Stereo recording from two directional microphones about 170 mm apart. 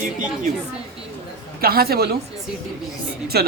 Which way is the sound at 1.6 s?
65° right (ahead or behind).